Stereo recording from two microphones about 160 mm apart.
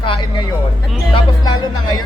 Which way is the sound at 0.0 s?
30° left (ahead or behind).